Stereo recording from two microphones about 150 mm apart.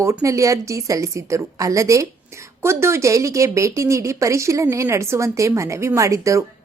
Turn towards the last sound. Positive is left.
turn(degrees=-20)  # may be behind; listen again after turning